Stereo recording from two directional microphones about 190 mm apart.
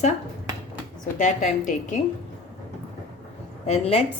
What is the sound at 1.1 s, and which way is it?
Speech, 40° left (ahead or behind).